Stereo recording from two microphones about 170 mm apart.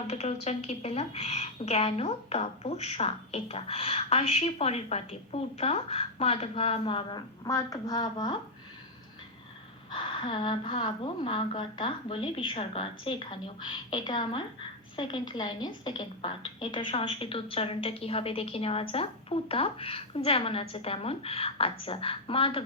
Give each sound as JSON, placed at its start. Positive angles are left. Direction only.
{"t": 0.1, "sound": "a woman's voice", "side_deg": 40}
{"t": 9.9, "sound": "a woman's voice", "side_deg": 30}